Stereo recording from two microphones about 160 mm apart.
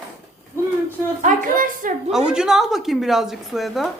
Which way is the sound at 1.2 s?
55° right (ahead or behind).